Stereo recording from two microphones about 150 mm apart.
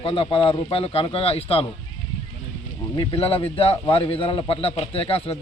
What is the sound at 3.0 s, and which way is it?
A man's voice, 35° left (ahead or behind).